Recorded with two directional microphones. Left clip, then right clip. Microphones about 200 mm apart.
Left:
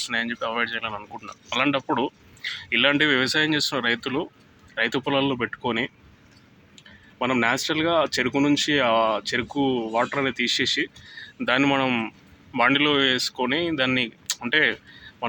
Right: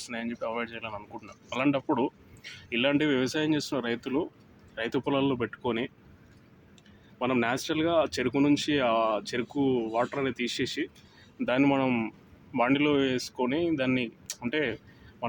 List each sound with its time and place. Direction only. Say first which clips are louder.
0.0 s speech: left 8 dB; 5° left (ahead or behind); by 5.9 s 25° left (ahead or behind)
7.2 s speech: left 6 dB; 25° left (ahead or behind)
11.3 s speech: left 4 dB; 5° left (ahead or behind)